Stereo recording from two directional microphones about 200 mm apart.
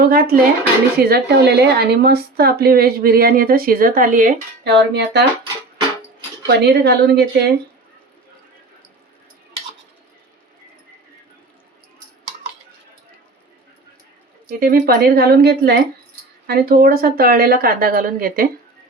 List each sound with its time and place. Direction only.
0.0 s speech: 50° right (ahead or behind)
4.6 s speech: 55° right (ahead or behind)
6.6 s speech: 55° right (ahead or behind)
14.4 s speech: 45° right (ahead or behind)